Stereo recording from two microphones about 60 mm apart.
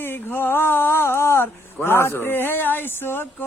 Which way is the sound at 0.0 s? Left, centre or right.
Left.